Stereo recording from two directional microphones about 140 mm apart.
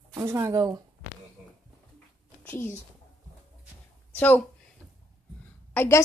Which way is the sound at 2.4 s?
15° left (ahead or behind).